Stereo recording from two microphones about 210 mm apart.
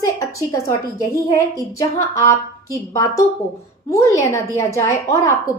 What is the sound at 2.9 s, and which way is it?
A woman's voice, 15° left (ahead or behind).